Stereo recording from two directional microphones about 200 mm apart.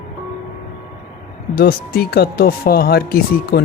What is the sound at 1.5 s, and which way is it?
Speech, 50° left (ahead or behind).